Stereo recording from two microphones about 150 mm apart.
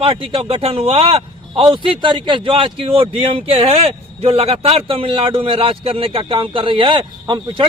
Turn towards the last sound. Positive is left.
turn(degrees=-30)  # may be behind; listen again after turning